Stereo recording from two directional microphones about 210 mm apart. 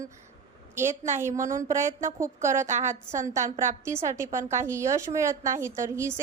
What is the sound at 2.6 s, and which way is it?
Speech, 35° right (ahead or behind).